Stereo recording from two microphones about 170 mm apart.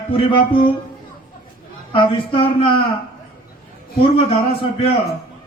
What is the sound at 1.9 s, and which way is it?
Speech, 30° left (ahead or behind).